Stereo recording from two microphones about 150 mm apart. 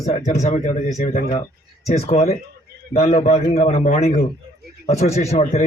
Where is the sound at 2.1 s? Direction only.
45° left (ahead or behind).